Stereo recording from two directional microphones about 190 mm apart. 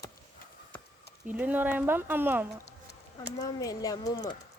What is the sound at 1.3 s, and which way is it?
Speech, 10° right (ahead or behind).